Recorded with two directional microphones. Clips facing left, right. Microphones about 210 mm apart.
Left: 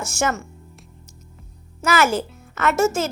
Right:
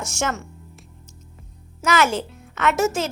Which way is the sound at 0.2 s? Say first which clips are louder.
Left 3 dB; 5° left (ahead or behind).